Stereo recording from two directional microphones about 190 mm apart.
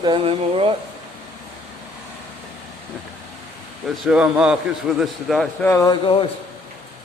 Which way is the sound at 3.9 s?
5° right (ahead or behind).